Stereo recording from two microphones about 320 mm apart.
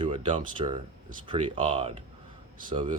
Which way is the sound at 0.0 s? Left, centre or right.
Centre.